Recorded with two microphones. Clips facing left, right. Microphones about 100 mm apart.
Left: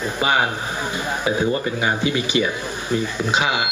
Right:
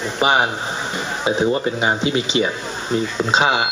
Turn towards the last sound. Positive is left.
turn(degrees=-25)  # may be behind; listen again after turning